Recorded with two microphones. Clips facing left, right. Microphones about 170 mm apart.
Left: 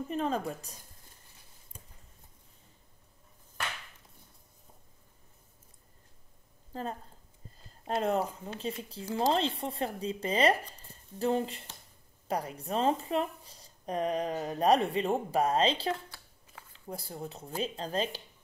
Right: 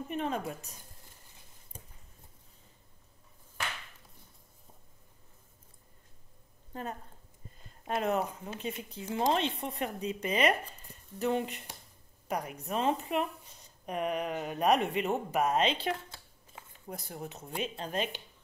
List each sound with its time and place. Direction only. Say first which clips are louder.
0.1 s speech: left 2 dB; 35° left (ahead or behind)
6.7 s a woman's voice: left 2 dB; 35° left (ahead or behind)